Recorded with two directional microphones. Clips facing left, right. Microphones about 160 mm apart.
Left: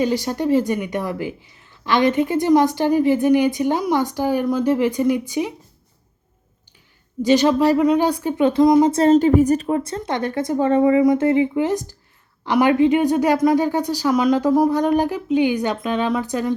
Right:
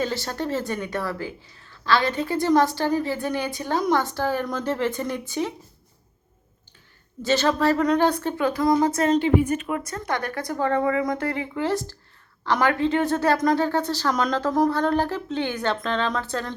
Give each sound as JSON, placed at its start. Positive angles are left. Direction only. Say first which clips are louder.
{"t": 0.0, "sound": "speech", "louder": "left 7 dB", "side_deg": 15}
{"t": 7.2, "sound": "speech", "louder": "left 6 dB", "side_deg": 15}
{"t": 8.4, "sound": "a woman's voice", "louder": "left 8 dB", "side_deg": 20}
{"t": 8.9, "sound": "a woman's voice", "louder": "left 6 dB", "side_deg": 35}